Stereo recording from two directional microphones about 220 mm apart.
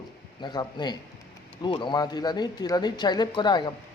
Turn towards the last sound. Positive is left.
turn(degrees=20)  # may be behind; listen again after turning